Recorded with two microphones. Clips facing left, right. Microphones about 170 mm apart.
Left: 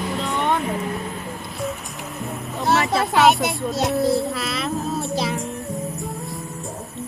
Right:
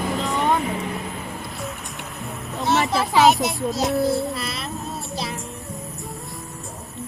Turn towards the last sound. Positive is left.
turn(degrees=0)  # may be behind; listen again after turning